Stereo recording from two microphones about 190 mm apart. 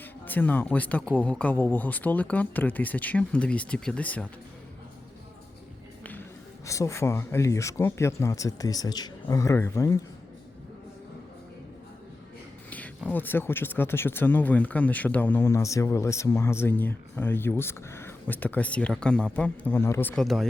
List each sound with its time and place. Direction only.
0.0 s speech: 10° left (ahead or behind)
6.0 s music: 10° left (ahead or behind)
6.7 s speech: 15° left (ahead or behind)
12.7 s speech: 10° left (ahead or behind)